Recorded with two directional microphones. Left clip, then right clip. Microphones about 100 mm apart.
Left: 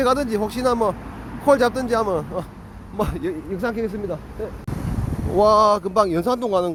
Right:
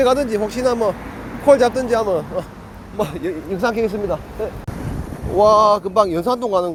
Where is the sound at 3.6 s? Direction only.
5° left (ahead or behind).